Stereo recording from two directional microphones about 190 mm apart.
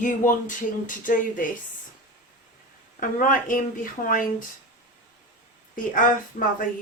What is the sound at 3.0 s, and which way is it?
A woman's voice, 45° left (ahead or behind).